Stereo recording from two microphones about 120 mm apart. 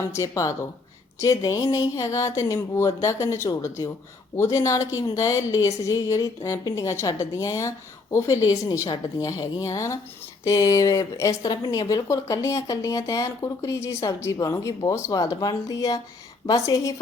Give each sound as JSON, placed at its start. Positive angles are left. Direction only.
{"t": 0.1, "sound": "speech", "side_deg": 25}